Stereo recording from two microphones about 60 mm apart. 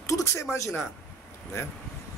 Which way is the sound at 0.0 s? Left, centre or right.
Left.